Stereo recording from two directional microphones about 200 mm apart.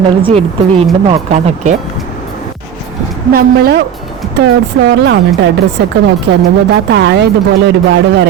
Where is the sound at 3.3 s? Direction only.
50° right (ahead or behind).